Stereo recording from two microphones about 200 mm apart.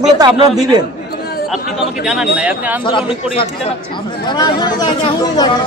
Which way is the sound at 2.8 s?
25° left (ahead or behind).